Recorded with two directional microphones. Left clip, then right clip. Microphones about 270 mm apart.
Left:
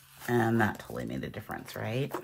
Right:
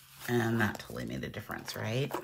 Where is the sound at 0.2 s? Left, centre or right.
Centre.